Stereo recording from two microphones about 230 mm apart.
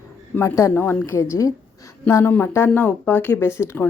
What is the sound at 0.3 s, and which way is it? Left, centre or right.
A woman's voice, centre.